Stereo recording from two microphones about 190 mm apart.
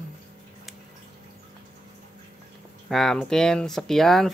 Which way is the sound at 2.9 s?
Centre (ahead or behind).